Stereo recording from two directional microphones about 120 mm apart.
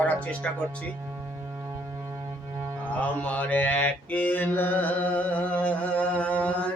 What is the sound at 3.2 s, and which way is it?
Mantra, 15° left (ahead or behind).